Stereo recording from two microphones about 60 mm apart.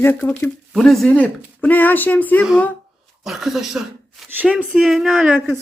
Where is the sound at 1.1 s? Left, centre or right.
Left.